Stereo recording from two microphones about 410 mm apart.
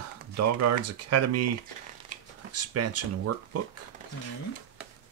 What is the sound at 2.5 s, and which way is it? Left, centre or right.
Speech, right.